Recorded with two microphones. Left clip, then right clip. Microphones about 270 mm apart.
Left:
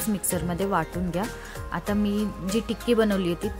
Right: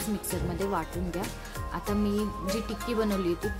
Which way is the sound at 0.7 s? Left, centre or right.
Left.